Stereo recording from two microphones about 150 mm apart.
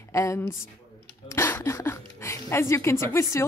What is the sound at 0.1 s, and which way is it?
Speech, 20° left (ahead or behind).